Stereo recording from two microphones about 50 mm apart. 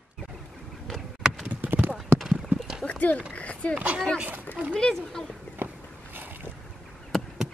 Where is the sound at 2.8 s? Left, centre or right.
Left.